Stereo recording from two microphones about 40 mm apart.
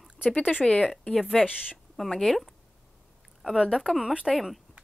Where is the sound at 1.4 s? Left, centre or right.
Centre.